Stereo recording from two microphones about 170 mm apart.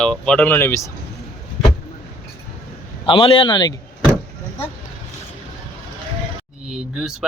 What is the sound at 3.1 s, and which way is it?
Speech, 30° left (ahead or behind).